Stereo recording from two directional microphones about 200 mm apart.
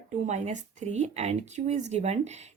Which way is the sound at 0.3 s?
35° right (ahead or behind).